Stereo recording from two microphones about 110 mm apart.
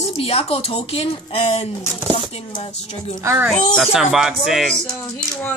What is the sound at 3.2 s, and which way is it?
Speech, 25° right (ahead or behind).